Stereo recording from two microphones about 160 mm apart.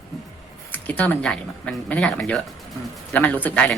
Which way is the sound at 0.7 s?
10° left (ahead or behind).